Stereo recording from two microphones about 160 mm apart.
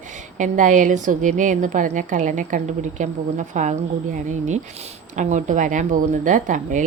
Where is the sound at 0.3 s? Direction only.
50° right (ahead or behind).